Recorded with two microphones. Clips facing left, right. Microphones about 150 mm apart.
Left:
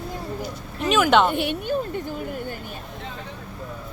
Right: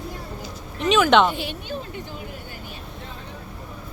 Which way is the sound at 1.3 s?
55° left (ahead or behind).